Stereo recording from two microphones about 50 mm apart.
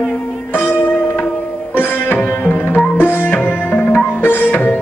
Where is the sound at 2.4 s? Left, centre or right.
Left.